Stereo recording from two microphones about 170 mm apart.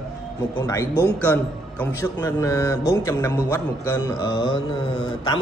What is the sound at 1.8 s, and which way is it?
A man's voice, 15° left (ahead or behind).